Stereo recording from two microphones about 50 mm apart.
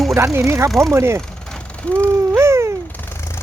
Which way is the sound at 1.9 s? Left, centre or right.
Left.